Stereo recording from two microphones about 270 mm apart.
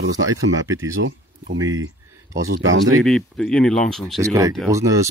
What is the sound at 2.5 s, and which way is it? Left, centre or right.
Speech, right.